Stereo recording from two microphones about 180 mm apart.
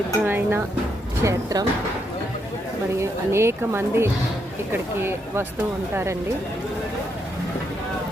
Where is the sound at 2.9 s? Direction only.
15° right (ahead or behind).